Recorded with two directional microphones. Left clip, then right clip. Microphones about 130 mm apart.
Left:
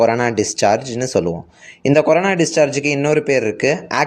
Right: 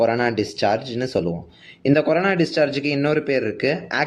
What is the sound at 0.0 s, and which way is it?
Speech, 30° left (ahead or behind).